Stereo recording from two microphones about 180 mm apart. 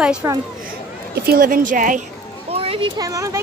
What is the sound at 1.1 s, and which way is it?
Speech, 60° right (ahead or behind).